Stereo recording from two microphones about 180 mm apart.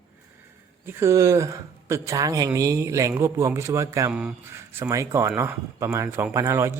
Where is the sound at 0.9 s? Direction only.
15° right (ahead or behind).